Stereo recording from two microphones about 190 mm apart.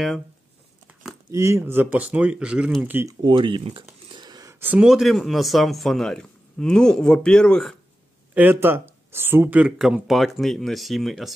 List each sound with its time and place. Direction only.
1.3 s speech: 15° right (ahead or behind)
3.2 s speech: 25° right (ahead or behind); by 7.7 s 5° left (ahead or behind)
8.4 s speech: 10° right (ahead or behind)